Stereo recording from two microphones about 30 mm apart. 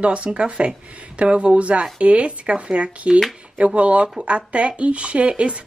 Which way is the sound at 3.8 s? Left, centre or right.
Right.